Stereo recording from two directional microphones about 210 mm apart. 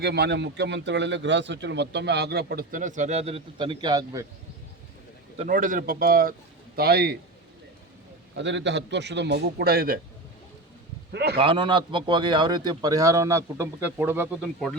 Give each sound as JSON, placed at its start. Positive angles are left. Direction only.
{"t": 0.0, "sound": "speech", "side_deg": -50}
{"t": 5.4, "sound": "speech", "side_deg": -40}
{"t": 8.4, "sound": "a man's voice", "side_deg": -60}
{"t": 11.1, "sound": "a man's voice", "side_deg": -50}
{"t": 11.3, "sound": "speech", "side_deg": -25}
{"t": 14.4, "sound": "speech", "side_deg": 5}